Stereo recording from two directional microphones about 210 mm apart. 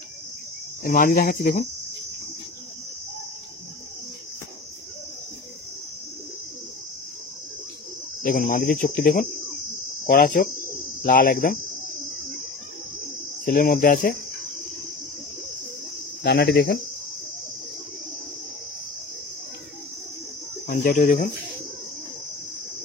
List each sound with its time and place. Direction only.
0.8 s cricket: 40° left (ahead or behind)
8.2 s speech: 40° left (ahead or behind)
8.8 s cricket: 45° left (ahead or behind)
10.0 s speech: 40° left (ahead or behind)
13.5 s speech: 40° left (ahead or behind)
16.2 s cricket: 55° left (ahead or behind)
20.6 s cricket: 45° left (ahead or behind)